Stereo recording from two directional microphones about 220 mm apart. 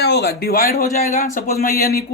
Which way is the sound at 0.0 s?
50° left (ahead or behind).